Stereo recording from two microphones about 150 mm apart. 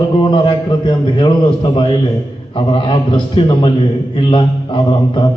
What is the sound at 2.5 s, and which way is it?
A man's voice, 35° left (ahead or behind).